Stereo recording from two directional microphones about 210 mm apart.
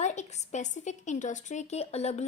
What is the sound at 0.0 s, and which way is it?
A woman's voice, 35° left (ahead or behind).